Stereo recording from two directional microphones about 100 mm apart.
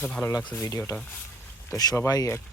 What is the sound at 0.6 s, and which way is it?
Speech, 30° left (ahead or behind).